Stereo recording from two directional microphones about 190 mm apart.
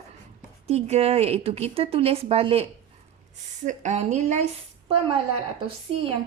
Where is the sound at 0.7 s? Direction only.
35° right (ahead or behind).